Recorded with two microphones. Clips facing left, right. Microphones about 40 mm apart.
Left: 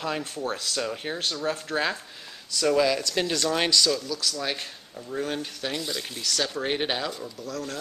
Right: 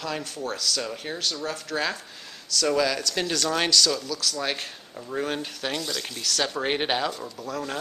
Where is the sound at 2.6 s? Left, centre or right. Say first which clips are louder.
Left 2 dB; centre.